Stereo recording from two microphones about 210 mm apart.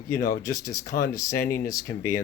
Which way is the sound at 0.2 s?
45° left (ahead or behind).